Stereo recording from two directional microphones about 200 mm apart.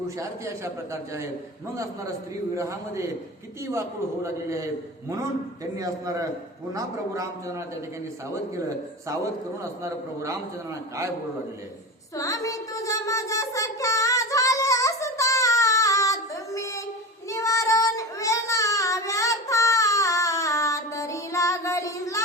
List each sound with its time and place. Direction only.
0.2 s a man's voice: 15° right (ahead or behind)
1.7 s a man's voice: 15° right (ahead or behind)
9.8 s a man's voice: 15° right (ahead or behind)
12.1 s a sound: 15° left (ahead or behind)
17.2 s child singing: 15° left (ahead or behind)